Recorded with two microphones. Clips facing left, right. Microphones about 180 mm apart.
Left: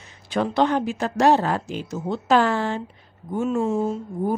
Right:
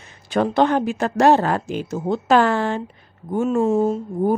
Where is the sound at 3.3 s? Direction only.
45° right (ahead or behind).